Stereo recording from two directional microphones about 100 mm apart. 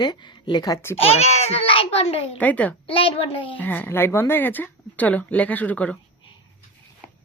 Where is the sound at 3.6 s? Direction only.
20° left (ahead or behind).